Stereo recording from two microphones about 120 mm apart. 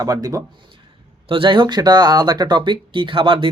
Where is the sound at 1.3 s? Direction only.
45° right (ahead or behind).